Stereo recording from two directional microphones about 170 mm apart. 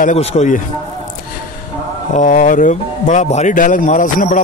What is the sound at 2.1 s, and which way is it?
Speech, 50° left (ahead or behind).